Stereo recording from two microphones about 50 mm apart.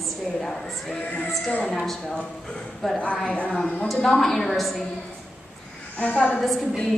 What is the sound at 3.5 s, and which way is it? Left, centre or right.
A woman's voice, centre.